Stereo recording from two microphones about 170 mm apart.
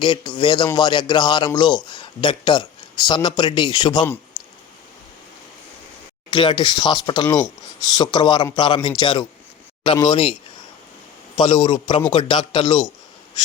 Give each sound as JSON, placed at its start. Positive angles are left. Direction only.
{"t": 0.0, "sound": "speech", "side_deg": 30}
{"t": 4.4, "sound": "a sound", "side_deg": 25}
{"t": 6.3, "sound": "speech", "side_deg": 30}
{"t": 11.3, "sound": "speech", "side_deg": 30}